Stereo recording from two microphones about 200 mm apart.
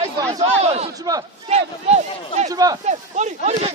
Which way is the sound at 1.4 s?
35° right (ahead or behind).